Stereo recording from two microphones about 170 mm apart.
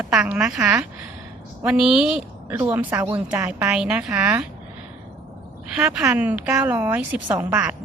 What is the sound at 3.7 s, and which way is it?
Speech, 5° right (ahead or behind).